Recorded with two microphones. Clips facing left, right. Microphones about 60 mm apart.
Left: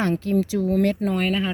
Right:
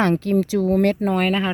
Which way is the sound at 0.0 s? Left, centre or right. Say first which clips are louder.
Right 3 dB; right.